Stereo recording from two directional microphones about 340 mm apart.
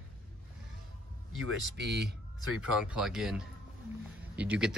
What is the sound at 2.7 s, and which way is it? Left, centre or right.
Speech, centre.